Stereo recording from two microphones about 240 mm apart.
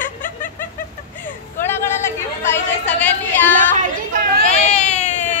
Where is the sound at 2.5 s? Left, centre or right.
Centre.